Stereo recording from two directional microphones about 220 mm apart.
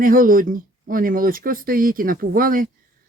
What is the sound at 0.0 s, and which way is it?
Speech, 40° right (ahead or behind).